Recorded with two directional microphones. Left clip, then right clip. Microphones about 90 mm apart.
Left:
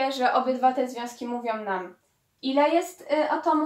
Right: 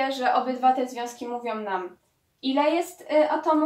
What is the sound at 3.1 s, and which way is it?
Speech, 15° left (ahead or behind).